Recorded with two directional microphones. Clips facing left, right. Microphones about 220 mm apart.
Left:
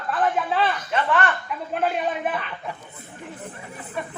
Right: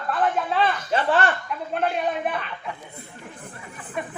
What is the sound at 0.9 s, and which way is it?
Speech, 30° right (ahead or behind).